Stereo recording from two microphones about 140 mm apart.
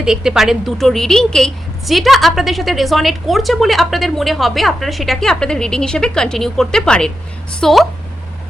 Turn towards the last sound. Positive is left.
turn(degrees=5)  # may be behind; listen again after turning